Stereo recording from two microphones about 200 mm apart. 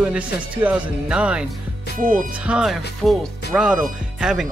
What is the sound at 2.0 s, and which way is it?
Music, 40° right (ahead or behind).